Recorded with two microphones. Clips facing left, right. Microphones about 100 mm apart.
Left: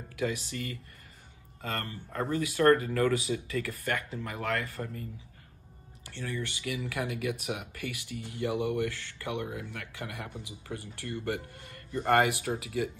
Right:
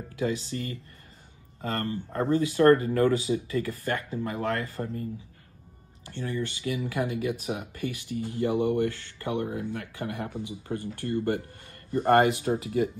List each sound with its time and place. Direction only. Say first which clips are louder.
0.1 s speech: right 3 dB; 30° right (ahead or behind)
6.0 s speech: right 5 dB; 35° right (ahead or behind)